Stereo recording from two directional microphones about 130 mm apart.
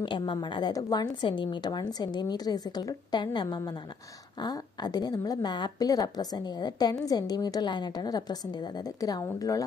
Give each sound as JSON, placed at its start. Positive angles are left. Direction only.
{"t": 0.0, "sound": "a woman's voice", "side_deg": 35}